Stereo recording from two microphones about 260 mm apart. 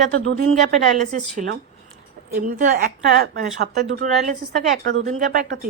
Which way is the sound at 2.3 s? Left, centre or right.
Right.